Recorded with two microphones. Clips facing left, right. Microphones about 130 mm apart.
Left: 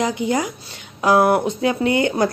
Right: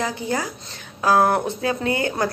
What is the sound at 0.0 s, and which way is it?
Speech, 15° left (ahead or behind).